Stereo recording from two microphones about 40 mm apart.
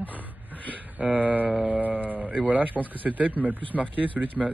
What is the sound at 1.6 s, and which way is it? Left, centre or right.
Speech, right.